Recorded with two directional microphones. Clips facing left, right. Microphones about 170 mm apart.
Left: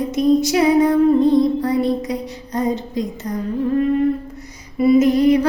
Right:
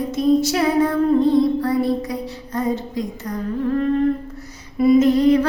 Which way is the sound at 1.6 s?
20° left (ahead or behind).